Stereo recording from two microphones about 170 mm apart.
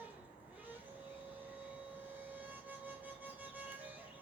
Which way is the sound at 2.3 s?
10° right (ahead or behind).